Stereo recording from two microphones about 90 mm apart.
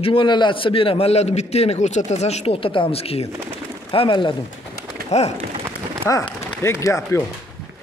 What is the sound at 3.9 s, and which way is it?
Speech, 80° left.